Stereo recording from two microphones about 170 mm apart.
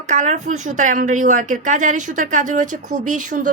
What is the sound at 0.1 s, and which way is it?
Speech, 45° right (ahead or behind).